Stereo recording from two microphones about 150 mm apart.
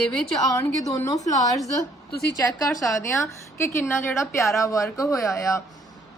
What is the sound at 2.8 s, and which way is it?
A woman's voice, 20° left (ahead or behind).